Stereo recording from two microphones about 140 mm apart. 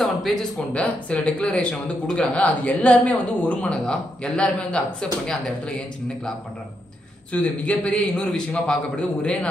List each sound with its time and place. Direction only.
0.0 s speech: centre (ahead or behind)
7.4 s speech: 10° left (ahead or behind)